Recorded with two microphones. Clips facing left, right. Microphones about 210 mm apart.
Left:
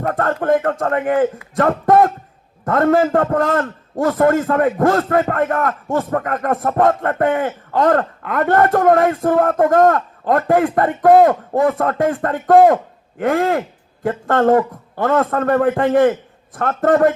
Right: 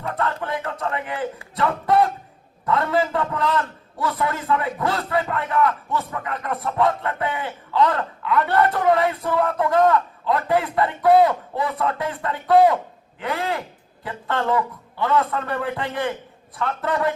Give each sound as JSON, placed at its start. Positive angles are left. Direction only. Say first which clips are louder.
{"t": 0.0, "sound": "a man's voice", "louder": "left 7 dB", "side_deg": 50}